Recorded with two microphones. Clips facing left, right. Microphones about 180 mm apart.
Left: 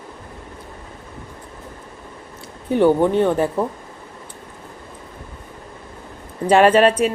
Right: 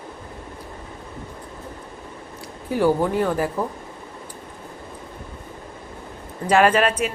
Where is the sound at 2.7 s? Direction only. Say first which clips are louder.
Left 4 dB; 25° left (ahead or behind).